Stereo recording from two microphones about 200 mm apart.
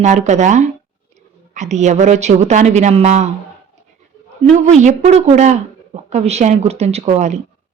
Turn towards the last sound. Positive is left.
turn(degrees=-35)  # may be behind; listen again after turning